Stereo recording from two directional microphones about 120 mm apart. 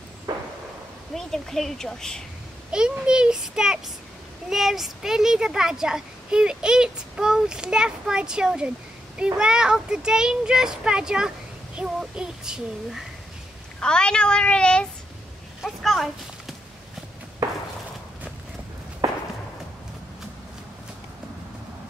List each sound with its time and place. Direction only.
0.3 s a sound: 35° right (ahead or behind)
1.1 s a child's voice: centre (ahead or behind)
2.7 s a child's voice: 5° right (ahead or behind)
13.7 s a woman's voice: 5° left (ahead or behind)